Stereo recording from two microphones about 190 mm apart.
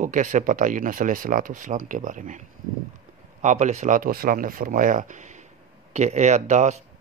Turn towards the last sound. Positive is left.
turn(degrees=-35)  # may be behind; listen again after turning